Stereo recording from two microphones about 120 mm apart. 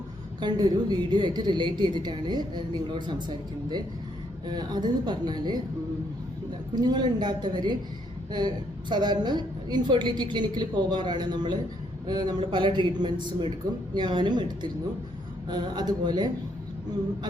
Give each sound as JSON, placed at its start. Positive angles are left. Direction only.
{"t": 0.3, "sound": "a woman's voice", "side_deg": -35}
{"t": 6.7, "sound": "a woman's voice", "side_deg": -35}